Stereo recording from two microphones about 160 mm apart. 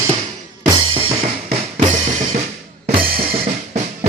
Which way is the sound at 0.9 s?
35° right (ahead or behind).